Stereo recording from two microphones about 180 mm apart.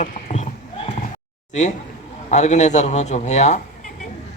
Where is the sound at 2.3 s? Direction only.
40° left (ahead or behind).